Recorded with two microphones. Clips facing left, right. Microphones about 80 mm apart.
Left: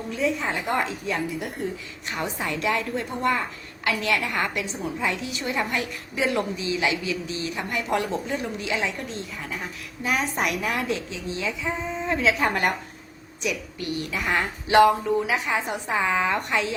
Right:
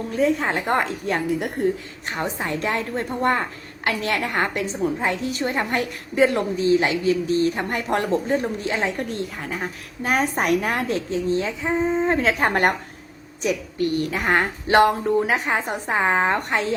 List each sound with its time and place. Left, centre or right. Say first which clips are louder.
0.1 s a woman's voice: right 5 dB; right